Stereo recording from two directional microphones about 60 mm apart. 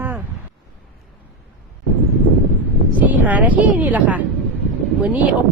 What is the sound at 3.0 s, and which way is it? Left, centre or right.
Speech, right.